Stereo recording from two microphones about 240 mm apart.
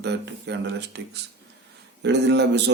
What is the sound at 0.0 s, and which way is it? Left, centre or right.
Speech, right.